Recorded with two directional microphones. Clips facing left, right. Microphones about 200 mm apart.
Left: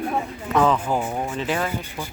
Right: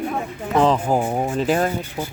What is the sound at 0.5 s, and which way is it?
Speech, 30° right (ahead or behind).